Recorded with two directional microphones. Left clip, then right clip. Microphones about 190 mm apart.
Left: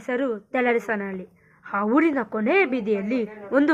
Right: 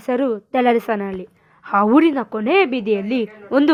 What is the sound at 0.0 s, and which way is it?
A woman's voice, 50° right (ahead or behind).